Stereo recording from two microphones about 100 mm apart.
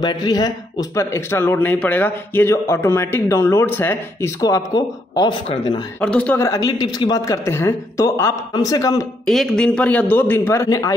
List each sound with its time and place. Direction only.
0.0 s speech: 45° left (ahead or behind); by 4.3 s 20° left (ahead or behind)
4.4 s speech: 35° left (ahead or behind)
5.9 s a man's voice: 10° left (ahead or behind)
6.3 s speech: 30° left (ahead or behind)
9.2 s a man's voice: centre (ahead or behind); by 10.9 s 30° left (ahead or behind)